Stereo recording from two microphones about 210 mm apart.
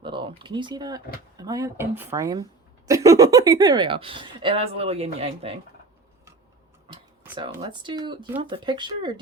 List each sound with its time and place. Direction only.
0.0 s speech: 25° right (ahead or behind)
7.5 s speech: 20° right (ahead or behind)